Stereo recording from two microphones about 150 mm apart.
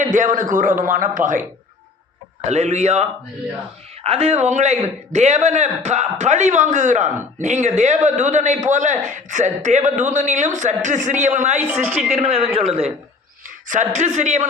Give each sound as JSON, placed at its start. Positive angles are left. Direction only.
{"t": 0.0, "sound": "a man's voice", "side_deg": -60}
{"t": 2.4, "sound": "a man's voice", "side_deg": -50}
{"t": 11.7, "sound": "a woman's voice", "side_deg": -15}
{"t": 12.1, "sound": "a woman's voice", "side_deg": -40}
{"t": 13.7, "sound": "a man's voice", "side_deg": -55}